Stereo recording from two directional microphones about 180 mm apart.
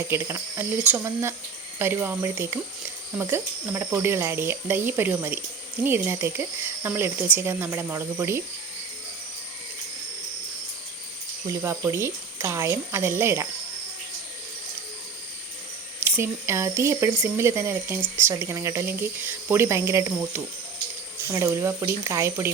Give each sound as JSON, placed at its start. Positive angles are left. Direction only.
{"t": 0.1, "sound": "speech", "side_deg": -15}
{"t": 11.4, "sound": "speech", "side_deg": -15}
{"t": 16.0, "sound": "speech", "side_deg": -10}